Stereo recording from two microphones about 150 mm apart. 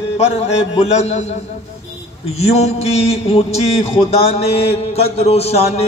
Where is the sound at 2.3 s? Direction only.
45° left (ahead or behind).